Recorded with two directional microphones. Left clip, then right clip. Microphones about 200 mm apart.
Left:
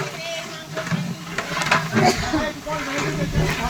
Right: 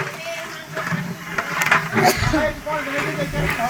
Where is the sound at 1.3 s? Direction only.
20° left (ahead or behind).